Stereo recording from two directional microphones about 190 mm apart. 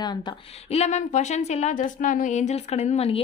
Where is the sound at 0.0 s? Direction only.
25° left (ahead or behind).